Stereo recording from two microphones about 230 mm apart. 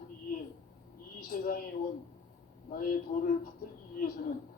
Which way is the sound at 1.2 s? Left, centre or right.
Left.